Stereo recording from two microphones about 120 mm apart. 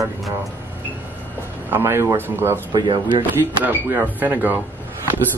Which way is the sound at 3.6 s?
15° right (ahead or behind).